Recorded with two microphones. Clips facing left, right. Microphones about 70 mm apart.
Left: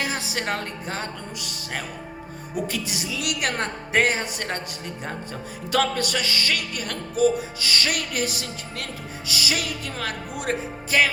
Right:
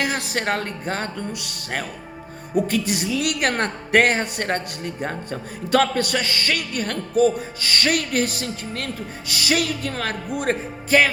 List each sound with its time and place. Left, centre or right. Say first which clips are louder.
0.0 s a man's voice: right 4 dB; right
2.6 s a man's voice: right 7 dB; right